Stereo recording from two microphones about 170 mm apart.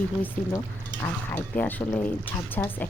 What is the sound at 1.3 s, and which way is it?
A woman's voice, 10° left (ahead or behind).